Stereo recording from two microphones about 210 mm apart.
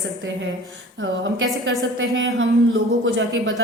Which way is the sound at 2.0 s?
65° right (ahead or behind).